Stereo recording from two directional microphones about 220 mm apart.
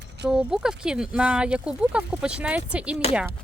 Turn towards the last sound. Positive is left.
turn(degrees=-5)  # may be behind; listen again after turning